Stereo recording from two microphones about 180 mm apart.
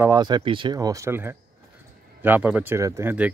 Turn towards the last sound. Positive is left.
turn(degrees=-10)  # may be behind; listen again after turning